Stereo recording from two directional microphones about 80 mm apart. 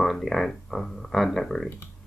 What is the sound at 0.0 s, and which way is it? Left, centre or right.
Speech, centre.